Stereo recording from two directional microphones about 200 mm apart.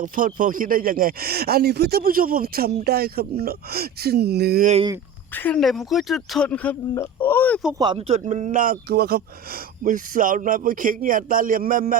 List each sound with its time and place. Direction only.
0.0 s speech: 40° right (ahead or behind)
5.3 s speech: 10° left (ahead or behind)
7.8 s speech: 25° right (ahead or behind); by 11.9 s 45° right (ahead or behind)